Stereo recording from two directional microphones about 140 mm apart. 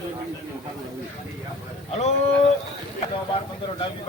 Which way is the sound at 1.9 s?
55° left (ahead or behind).